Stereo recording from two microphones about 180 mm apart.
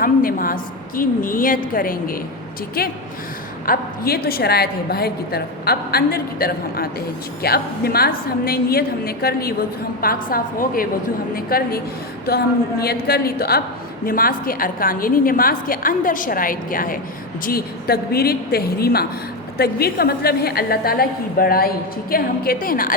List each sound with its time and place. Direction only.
0.0 s a woman's voice: 50° left (ahead or behind)
12.8 s a woman's voice: 60° left (ahead or behind)